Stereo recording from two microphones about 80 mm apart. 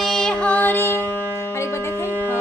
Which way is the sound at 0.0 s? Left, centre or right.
Centre.